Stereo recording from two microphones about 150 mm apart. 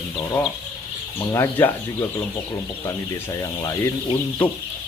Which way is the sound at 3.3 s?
20° left (ahead or behind).